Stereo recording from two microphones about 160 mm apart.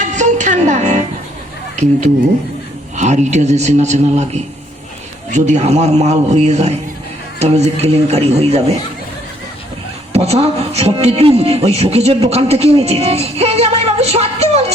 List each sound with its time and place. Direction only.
0.0 s music: 50° right (ahead or behind)
2.9 s a man's voice: 45° right (ahead or behind)
10.1 s speech: 40° right (ahead or behind)